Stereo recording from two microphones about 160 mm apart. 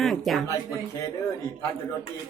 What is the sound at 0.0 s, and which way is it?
Speech, centre (ahead or behind).